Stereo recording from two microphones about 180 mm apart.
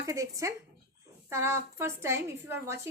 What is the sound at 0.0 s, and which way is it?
A woman's voice, 20° right (ahead or behind).